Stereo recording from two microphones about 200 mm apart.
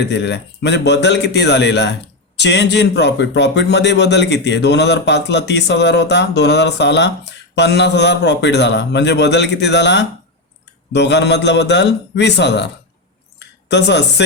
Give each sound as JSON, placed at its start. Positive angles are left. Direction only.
{"t": 0.0, "sound": "a man's voice", "side_deg": 60}
{"t": 13.7, "sound": "a man's voice", "side_deg": 60}